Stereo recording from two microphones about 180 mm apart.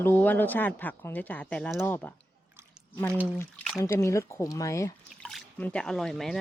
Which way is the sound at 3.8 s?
15° left (ahead or behind).